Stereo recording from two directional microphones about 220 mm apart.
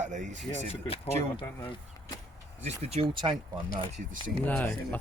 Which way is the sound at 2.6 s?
25° right (ahead or behind).